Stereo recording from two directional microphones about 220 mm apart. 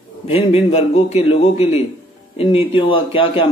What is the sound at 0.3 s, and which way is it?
A man's voice, 25° left (ahead or behind).